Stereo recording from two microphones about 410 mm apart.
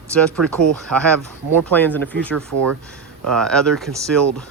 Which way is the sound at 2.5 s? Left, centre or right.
Right.